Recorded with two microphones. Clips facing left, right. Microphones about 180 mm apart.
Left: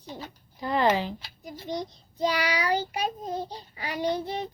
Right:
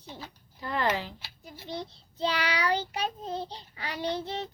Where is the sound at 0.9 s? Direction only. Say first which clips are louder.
Left 5 dB; 15° left (ahead or behind).